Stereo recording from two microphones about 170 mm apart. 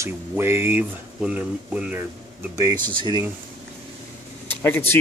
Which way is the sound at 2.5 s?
20° right (ahead or behind).